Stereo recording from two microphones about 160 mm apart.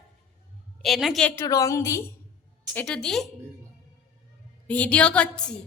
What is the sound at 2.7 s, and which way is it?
Speech, 5° left (ahead or behind).